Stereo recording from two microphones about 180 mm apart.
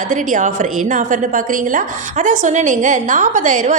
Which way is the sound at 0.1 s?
45° right (ahead or behind).